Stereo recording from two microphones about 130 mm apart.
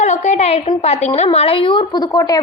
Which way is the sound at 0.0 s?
60° left (ahead or behind).